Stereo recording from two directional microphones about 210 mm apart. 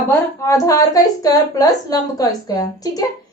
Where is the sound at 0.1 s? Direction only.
15° left (ahead or behind).